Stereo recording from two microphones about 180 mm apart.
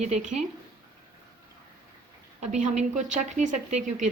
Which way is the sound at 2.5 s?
40° right (ahead or behind).